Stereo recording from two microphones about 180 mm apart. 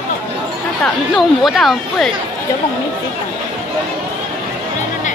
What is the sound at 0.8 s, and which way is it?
Speech, centre (ahead or behind).